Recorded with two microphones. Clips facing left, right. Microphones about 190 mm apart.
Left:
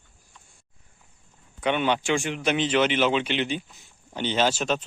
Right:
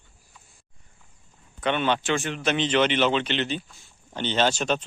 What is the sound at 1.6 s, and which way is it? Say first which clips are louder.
A man's voice: even; 10° left (ahead or behind).